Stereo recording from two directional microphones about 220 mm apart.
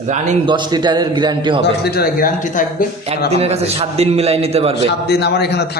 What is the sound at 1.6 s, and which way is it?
A man's voice, 45° left (ahead or behind).